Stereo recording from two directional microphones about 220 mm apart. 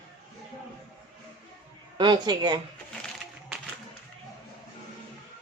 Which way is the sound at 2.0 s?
20° right (ahead or behind).